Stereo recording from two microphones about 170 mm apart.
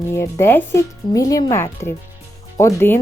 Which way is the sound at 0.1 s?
15° left (ahead or behind).